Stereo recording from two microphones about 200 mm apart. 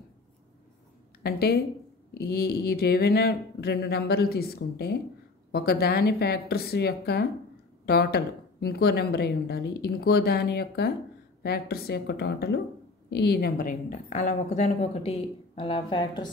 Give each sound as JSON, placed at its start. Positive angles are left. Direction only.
{"t": 1.2, "sound": "a woman's voice", "side_deg": 50}